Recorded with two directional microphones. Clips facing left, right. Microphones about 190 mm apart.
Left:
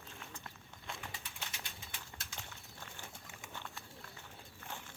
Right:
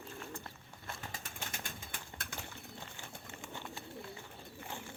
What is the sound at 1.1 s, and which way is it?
Bird, 45° right (ahead or behind).